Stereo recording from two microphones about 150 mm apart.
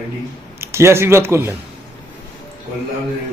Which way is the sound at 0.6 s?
15° right (ahead or behind).